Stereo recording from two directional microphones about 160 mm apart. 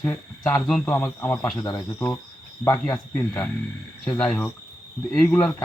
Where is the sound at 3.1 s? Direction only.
5° left (ahead or behind).